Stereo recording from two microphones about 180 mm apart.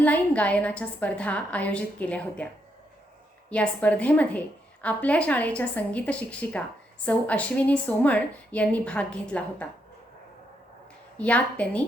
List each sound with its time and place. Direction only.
0.0 s a woman's voice: 10° left (ahead or behind)
3.5 s a woman's voice: 5° left (ahead or behind)
11.2 s a woman's voice: 5° left (ahead or behind)